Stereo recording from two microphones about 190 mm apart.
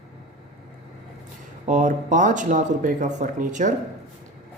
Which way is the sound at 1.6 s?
40° right (ahead or behind).